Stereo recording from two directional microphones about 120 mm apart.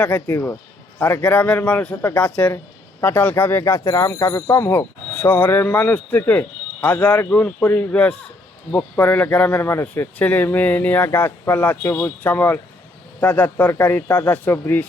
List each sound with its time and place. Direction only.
0.0 s speech: 15° left (ahead or behind)